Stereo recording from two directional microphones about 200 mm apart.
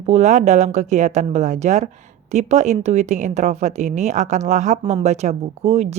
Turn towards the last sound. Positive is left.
turn(degrees=-30)  # may be behind; listen again after turning